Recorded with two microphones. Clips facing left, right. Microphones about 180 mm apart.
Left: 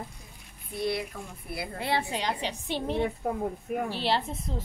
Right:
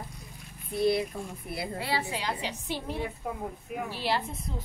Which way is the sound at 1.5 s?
25° right (ahead or behind).